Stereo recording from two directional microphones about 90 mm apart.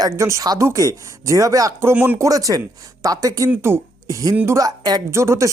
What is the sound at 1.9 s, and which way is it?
Speech, 20° right (ahead or behind).